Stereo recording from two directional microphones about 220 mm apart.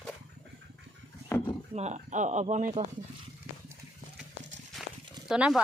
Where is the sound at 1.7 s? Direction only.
30° right (ahead or behind).